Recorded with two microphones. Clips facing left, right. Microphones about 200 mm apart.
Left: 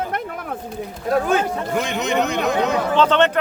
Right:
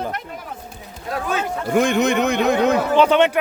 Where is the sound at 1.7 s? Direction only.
50° right (ahead or behind).